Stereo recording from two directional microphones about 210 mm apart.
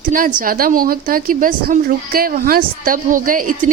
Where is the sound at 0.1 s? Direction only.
40° right (ahead or behind).